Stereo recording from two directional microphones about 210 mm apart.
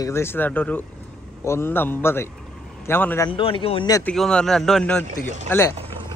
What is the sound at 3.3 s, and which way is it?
Speech, 25° left (ahead or behind).